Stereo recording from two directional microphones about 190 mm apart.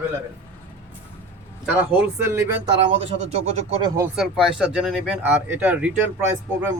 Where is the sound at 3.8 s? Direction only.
20° right (ahead or behind).